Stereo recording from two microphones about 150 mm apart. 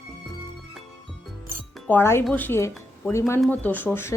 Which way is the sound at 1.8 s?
15° left (ahead or behind).